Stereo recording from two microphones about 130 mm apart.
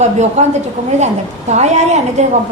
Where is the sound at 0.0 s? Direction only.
60° right (ahead or behind).